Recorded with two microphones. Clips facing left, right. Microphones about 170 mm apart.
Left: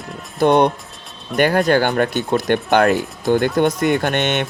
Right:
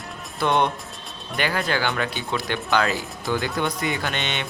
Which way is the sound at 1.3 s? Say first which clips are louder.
Left 10 dB; 50° left (ahead or behind).